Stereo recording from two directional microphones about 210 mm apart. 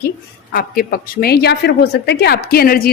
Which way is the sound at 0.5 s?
45° left (ahead or behind).